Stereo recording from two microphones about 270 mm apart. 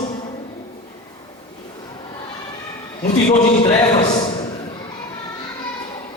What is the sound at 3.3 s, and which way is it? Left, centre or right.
Speech, centre.